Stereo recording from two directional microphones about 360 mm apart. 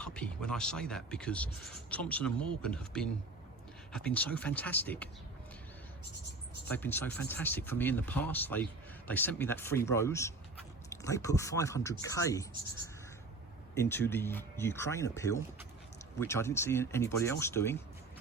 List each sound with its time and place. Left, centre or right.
0.0 s speech: centre
6.7 s speech: centre
13.7 s speech: centre